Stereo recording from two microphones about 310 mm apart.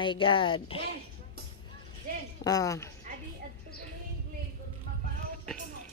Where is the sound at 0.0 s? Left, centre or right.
Centre.